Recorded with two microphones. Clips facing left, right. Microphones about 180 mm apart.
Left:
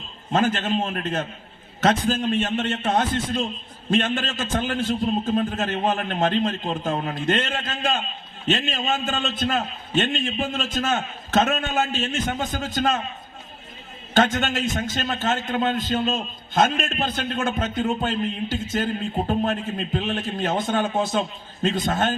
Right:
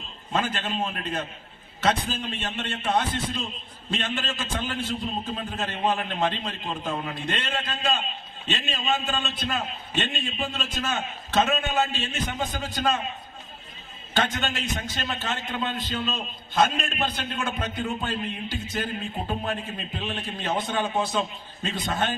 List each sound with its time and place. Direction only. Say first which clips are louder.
0.3 s a man's voice: left 6 dB; 50° left (ahead or behind)
14.1 s a man's voice: left 6 dB; 45° left (ahead or behind)